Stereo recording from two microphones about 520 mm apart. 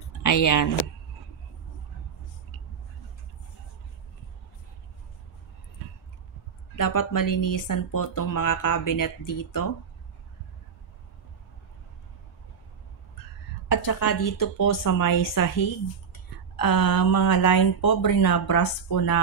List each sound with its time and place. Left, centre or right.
0.2 s speech: left
6.8 s speech: left
13.7 s a woman's voice: left